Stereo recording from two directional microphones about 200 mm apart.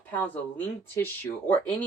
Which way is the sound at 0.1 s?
10° left (ahead or behind).